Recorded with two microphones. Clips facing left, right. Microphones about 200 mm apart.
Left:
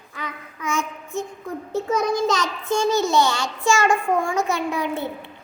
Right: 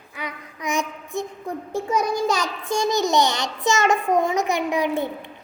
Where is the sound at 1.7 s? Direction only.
10° right (ahead or behind).